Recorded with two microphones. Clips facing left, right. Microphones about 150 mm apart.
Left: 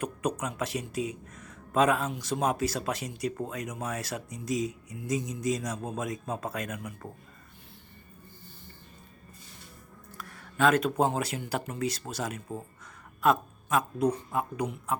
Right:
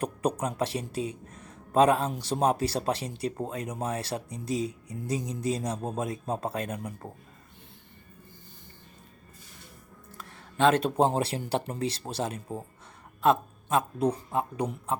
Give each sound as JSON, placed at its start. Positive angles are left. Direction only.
{"t": 0.0, "sound": "speech", "side_deg": -35}
{"t": 10.2, "sound": "speech", "side_deg": -25}